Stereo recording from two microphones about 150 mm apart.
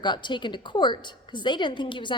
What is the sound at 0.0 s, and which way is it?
Speech, 30° left (ahead or behind).